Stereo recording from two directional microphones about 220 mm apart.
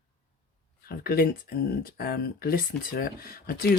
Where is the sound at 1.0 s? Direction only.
45° left (ahead or behind).